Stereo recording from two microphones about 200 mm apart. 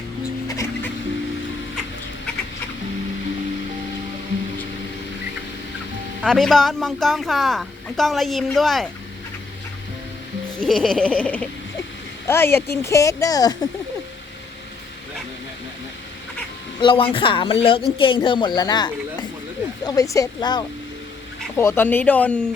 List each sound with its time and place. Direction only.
0.4 s music: 15° left (ahead or behind)
6.2 s speech: centre (ahead or behind)
10.6 s speech: centre (ahead or behind); by 13.7 s 20° left (ahead or behind)
16.8 s a woman's voice: 25° left (ahead or behind); by 22.4 s 5° left (ahead or behind)